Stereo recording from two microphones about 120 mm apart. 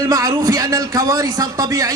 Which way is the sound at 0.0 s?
30° right (ahead or behind).